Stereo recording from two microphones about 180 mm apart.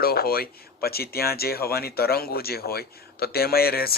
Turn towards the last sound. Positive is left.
turn(degrees=60)  # may be behind; listen again after turning